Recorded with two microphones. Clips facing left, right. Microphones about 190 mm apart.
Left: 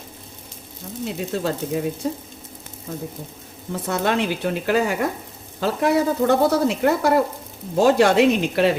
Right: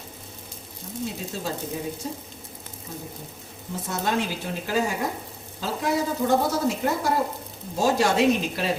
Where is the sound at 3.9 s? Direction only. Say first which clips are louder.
Left 5 dB; 65° left (ahead or behind).